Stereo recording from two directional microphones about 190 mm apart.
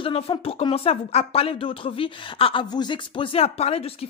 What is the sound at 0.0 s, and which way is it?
Speech, 30° left (ahead or behind).